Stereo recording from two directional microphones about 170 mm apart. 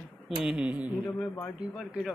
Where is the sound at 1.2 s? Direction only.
5° left (ahead or behind).